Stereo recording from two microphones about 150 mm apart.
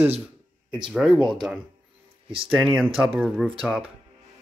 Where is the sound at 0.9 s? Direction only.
5° right (ahead or behind).